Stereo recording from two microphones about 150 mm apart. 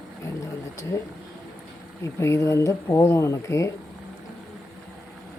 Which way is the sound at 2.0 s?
20° left (ahead or behind).